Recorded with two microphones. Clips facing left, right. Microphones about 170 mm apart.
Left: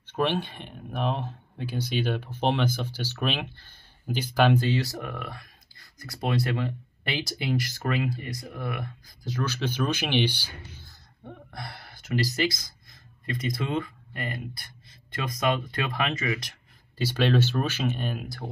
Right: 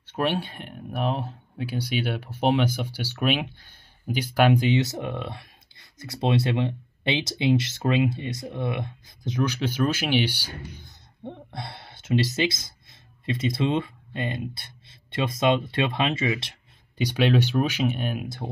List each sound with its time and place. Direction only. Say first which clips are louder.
0.1 s speech: right 1 dB; 10° right (ahead or behind); by 16.5 s 25° right (ahead or behind)
17.0 s speech: right 2 dB; 15° right (ahead or behind)